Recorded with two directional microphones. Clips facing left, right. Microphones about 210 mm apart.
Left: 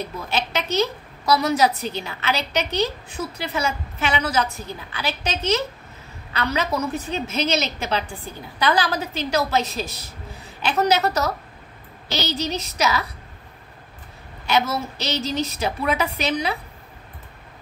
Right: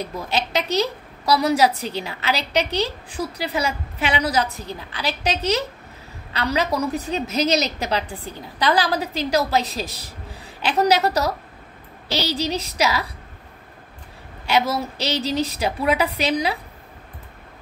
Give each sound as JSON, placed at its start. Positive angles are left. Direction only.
{"t": 0.3, "sound": "a woman's voice", "side_deg": -35}
{"t": 14.4, "sound": "a woman's voice", "side_deg": -30}